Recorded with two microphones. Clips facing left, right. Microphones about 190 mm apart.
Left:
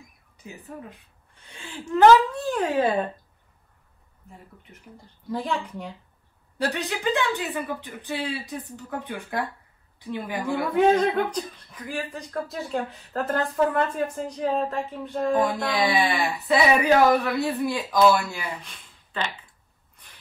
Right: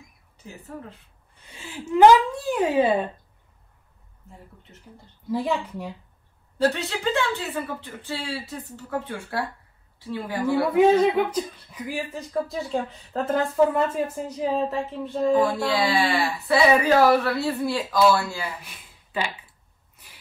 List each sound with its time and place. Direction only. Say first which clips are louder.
0.4 s speech: right 1 dB; 15° left (ahead or behind)
1.6 s speech: right 2 dB; 10° right (ahead or behind)
5.3 s speech: right 3 dB; 5° right (ahead or behind)
6.7 s speech: even; 15° left (ahead or behind)
10.4 s speech: right 3 dB; 10° right (ahead or behind)
15.4 s speech: right 1 dB; 15° left (ahead or behind)
18.6 s a sound: right 1 dB; 10° right (ahead or behind)